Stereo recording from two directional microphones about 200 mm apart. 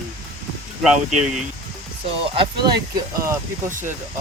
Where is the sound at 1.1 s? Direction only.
35° right (ahead or behind).